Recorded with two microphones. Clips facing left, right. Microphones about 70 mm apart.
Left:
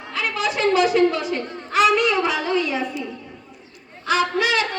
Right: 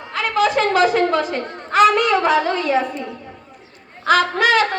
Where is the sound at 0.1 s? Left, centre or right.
Right.